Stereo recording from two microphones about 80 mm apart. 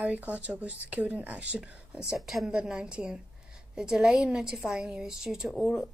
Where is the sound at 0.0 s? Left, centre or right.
Centre.